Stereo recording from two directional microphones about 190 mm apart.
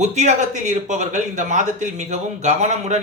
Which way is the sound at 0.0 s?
40° right (ahead or behind).